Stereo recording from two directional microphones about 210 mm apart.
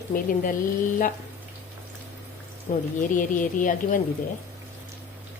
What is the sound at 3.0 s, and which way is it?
A woman's voice, 40° left (ahead or behind).